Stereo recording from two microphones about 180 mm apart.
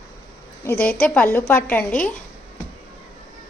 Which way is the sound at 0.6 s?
10° left (ahead or behind).